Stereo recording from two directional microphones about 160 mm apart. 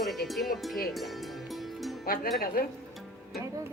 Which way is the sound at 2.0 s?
65° left (ahead or behind).